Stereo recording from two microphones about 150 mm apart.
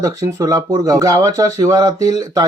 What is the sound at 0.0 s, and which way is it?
Speech, 25° right (ahead or behind).